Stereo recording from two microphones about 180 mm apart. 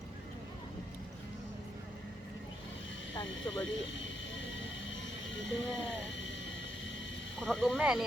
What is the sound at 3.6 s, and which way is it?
Vehicle, 90° left.